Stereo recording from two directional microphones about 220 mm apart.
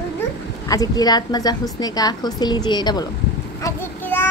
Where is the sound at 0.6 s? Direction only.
15° left (ahead or behind).